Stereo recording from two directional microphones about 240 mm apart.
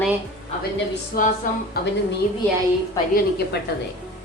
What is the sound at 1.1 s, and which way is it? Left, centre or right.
Speech, left.